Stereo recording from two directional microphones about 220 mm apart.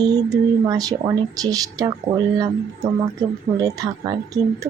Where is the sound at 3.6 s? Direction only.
15° right (ahead or behind).